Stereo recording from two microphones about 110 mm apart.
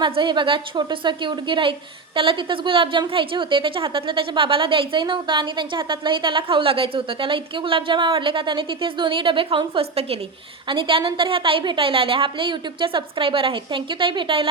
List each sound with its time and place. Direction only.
0.0 s a woman's voice: 45° right (ahead or behind); by 10.2 s 65° right (ahead or behind)
10.7 s a woman's voice: 50° right (ahead or behind)